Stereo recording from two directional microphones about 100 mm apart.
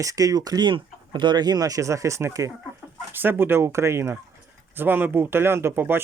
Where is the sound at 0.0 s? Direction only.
35° right (ahead or behind).